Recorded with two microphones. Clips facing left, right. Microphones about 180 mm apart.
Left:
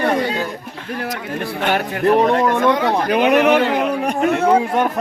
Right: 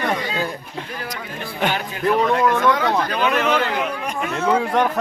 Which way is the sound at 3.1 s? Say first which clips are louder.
Left 6 dB; 65° left (ahead or behind).